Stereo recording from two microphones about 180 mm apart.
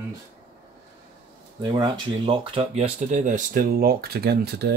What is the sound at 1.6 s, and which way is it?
Speech, 25° right (ahead or behind).